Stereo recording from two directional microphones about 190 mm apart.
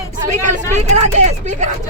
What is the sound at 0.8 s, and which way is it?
Speech, 35° right (ahead or behind).